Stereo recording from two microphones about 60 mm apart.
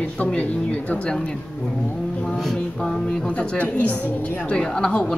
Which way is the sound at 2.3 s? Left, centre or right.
Centre.